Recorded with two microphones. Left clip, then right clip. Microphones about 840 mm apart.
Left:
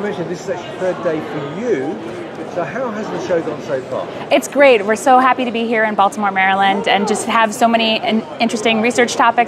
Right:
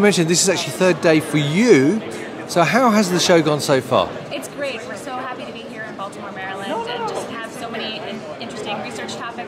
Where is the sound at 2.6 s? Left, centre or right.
Right.